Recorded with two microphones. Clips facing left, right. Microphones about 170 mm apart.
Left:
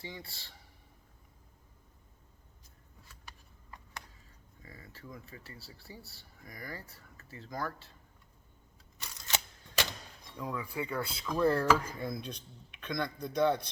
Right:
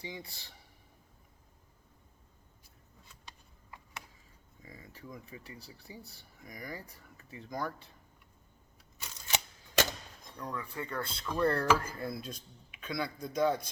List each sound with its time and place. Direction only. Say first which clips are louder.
0.0 s speech: right 1 dB; 15° right (ahead or behind)
4.6 s speech: right 1 dB; 15° right (ahead or behind)
9.0 s camera: right 1 dB; 10° right (ahead or behind)
10.3 s speech: left 3 dB; 10° left (ahead or behind)